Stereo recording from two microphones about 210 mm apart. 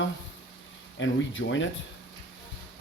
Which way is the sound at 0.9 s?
65° left (ahead or behind).